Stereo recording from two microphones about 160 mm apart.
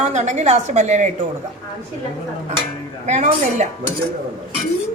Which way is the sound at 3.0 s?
45° right (ahead or behind).